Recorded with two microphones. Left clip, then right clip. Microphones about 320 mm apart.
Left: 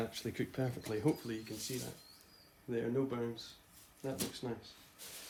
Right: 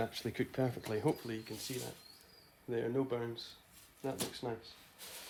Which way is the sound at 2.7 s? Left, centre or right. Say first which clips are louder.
Right 1 dB; right.